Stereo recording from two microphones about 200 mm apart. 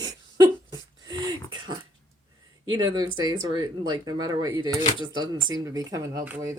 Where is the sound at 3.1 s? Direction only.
20° right (ahead or behind).